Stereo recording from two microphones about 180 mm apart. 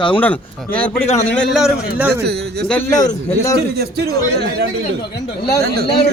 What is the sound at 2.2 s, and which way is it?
A man's voice, 65° right (ahead or behind).